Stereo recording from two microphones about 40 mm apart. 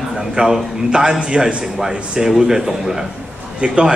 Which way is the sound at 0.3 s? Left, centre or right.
Centre.